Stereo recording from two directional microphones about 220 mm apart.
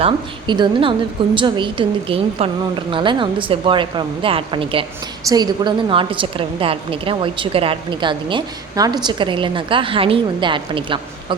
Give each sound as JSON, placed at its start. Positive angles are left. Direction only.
{"t": 0.0, "sound": "a woman's voice", "side_deg": -20}